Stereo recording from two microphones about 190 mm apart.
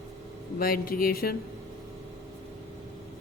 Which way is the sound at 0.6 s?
50° left (ahead or behind).